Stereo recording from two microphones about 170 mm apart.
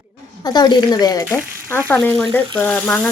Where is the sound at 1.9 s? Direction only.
10° left (ahead or behind).